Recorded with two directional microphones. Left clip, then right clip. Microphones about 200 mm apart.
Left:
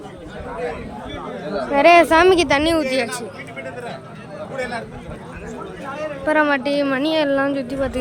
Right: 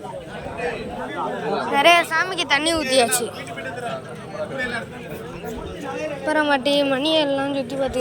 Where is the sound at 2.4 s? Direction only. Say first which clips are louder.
Left 2 dB; 20° left (ahead or behind).